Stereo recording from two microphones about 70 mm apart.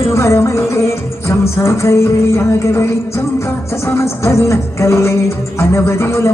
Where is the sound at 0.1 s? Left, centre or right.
Left.